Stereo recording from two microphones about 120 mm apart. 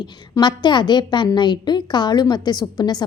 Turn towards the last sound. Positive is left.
turn(degrees=35)  # may be behind; listen again after turning